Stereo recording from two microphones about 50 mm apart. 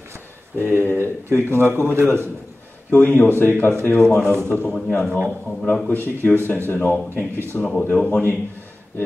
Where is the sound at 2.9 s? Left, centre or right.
Left.